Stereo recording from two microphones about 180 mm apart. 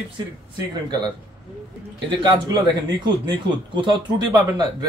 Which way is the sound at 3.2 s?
25° right (ahead or behind).